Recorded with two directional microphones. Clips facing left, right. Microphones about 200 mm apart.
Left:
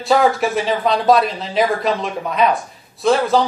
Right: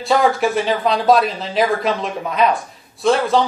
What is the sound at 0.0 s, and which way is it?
Speech, centre (ahead or behind).